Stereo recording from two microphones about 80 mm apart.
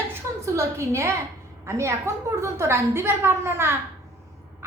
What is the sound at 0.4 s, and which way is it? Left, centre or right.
A woman's voice, right.